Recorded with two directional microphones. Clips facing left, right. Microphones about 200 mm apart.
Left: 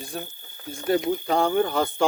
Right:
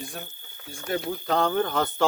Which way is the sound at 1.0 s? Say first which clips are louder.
Left 3 dB; 15° left (ahead or behind).